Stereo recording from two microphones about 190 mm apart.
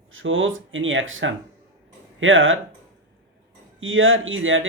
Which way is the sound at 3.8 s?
90° right.